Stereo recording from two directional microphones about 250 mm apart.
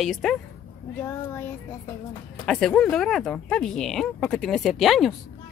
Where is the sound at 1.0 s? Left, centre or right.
Centre.